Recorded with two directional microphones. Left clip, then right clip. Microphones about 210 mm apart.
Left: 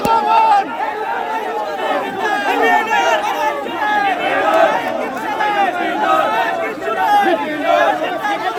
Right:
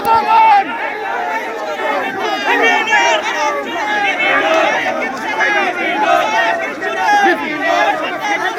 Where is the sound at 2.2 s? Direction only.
35° left (ahead or behind).